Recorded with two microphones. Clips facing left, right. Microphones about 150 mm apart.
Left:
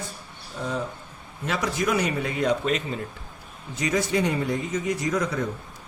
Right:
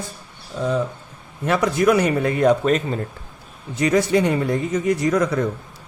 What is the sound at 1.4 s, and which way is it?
A man's voice, 60° right (ahead or behind).